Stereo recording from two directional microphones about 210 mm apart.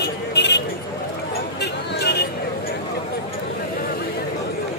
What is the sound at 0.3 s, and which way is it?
Vehicle, 55° left (ahead or behind).